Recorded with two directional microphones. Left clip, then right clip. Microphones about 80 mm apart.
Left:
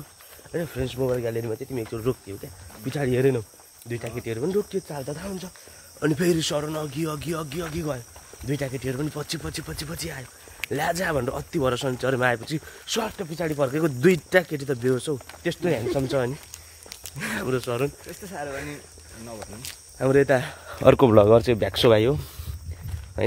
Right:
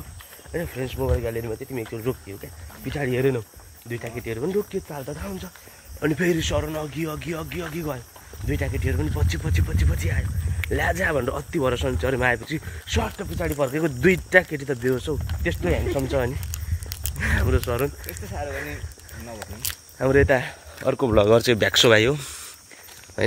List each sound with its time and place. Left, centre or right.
0.6 s speech: left
1.2 s speech: left
3.9 s speech: left
5.9 s speech: left
6.8 s speech: left
7.7 s speech: left
11.2 s speech: centre
11.6 s speech: left
16.0 s speech: centre
17.2 s speech: centre
20.0 s speech: centre
21.3 s speech: centre
21.7 s speech: left